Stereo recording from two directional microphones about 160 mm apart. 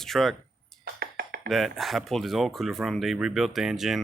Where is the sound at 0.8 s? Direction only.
85° right.